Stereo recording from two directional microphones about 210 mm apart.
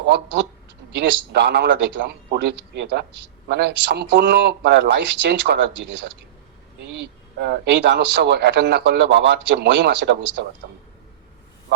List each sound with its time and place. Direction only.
0.9 s a man's voice: 55° right (ahead or behind)
6.9 s a man's voice: 55° right (ahead or behind)